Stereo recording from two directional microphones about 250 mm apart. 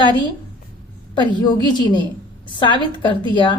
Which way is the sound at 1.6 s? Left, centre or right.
Centre.